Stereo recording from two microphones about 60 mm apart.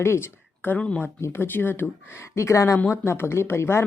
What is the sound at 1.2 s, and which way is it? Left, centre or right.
Speech, left.